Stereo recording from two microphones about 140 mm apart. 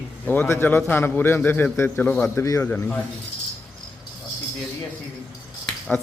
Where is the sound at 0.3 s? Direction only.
15° left (ahead or behind).